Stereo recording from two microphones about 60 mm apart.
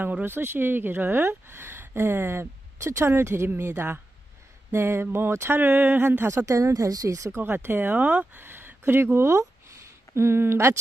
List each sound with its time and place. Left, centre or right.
0.0 s speech: right
7.3 s speech: right